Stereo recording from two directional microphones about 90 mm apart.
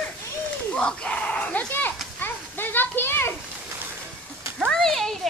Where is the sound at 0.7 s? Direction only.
10° left (ahead or behind).